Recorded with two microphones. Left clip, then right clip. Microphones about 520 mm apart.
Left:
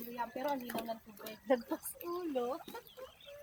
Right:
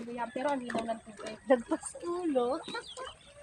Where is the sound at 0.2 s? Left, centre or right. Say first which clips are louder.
Right 5 dB; left.